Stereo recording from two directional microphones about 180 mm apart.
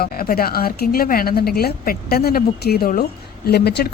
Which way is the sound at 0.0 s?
55° left (ahead or behind).